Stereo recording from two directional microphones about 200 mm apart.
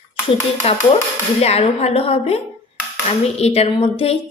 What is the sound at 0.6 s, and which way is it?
A woman's voice, 30° left (ahead or behind).